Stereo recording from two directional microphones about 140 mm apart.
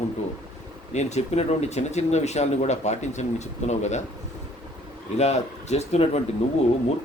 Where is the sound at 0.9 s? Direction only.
50° left (ahead or behind).